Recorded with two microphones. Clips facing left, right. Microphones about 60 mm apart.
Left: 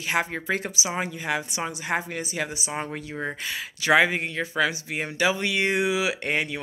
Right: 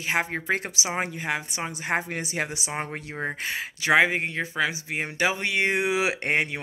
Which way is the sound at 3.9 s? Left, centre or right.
Right.